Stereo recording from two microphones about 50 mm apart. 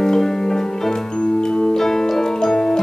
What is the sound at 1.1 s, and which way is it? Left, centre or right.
Music, centre.